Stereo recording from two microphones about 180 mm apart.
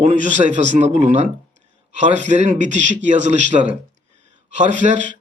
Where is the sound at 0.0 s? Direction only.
40° right (ahead or behind).